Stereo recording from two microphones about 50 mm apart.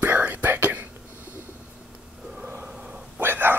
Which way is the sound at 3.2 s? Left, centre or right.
Right.